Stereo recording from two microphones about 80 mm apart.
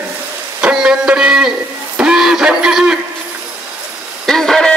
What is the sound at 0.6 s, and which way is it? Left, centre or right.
Music, centre.